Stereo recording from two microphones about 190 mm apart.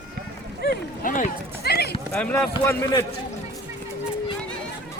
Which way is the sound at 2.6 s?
15° left (ahead or behind).